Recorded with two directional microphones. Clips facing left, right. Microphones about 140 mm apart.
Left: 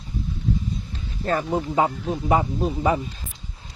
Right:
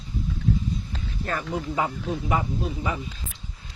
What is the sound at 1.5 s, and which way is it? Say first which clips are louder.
Speech: left 4 dB; 25° left (ahead or behind).